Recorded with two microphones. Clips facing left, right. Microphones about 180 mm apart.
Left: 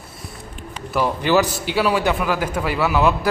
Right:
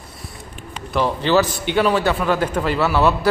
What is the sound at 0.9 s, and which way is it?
A man's voice, 10° left (ahead or behind).